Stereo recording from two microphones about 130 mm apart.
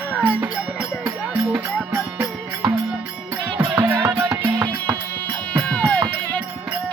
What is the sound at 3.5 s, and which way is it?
Music, 30° right (ahead or behind).